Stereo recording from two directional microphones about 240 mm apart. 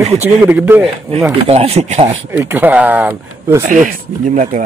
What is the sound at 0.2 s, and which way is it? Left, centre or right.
Speech, centre.